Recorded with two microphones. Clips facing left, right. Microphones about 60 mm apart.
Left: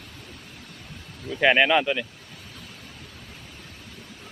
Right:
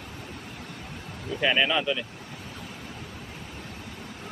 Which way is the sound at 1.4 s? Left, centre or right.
Left.